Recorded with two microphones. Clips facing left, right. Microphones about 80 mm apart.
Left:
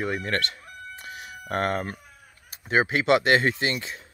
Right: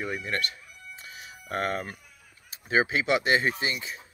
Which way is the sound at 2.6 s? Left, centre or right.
Left.